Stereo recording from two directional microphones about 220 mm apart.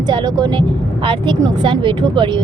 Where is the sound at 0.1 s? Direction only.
20° right (ahead or behind).